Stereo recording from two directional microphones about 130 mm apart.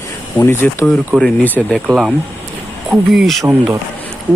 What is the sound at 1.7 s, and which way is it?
Speech, centre (ahead or behind).